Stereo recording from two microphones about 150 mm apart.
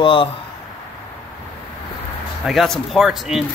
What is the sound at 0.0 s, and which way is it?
Speech, 35° left (ahead or behind).